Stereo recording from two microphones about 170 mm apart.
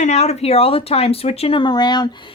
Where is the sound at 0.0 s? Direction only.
40° left (ahead or behind).